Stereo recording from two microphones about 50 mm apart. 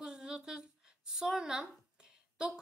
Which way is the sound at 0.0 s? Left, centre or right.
Centre.